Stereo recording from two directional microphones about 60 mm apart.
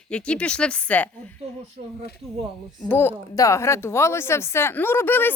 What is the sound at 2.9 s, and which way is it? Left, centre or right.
Speech, left.